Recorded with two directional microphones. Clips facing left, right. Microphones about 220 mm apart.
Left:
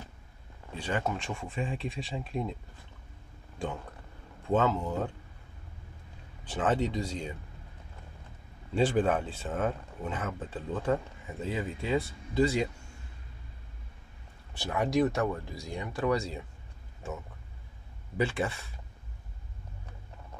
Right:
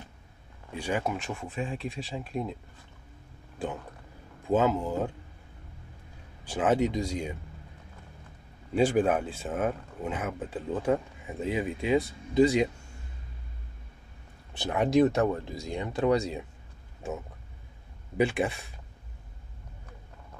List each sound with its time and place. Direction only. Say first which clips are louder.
0.7 s speech: right 2 dB; 10° right (ahead or behind)
4.5 s speech: right 2 dB; 10° right (ahead or behind)
6.4 s speech: right 3 dB; 10° right (ahead or behind)
8.7 s speech: right 2 dB; 10° right (ahead or behind)
14.6 s speech: right 4 dB; 20° right (ahead or behind)
18.1 s speech: right 4 dB; 15° right (ahead or behind)